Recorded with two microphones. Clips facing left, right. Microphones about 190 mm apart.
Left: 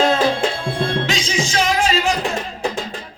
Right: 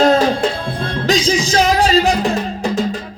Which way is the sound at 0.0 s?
40° right (ahead or behind).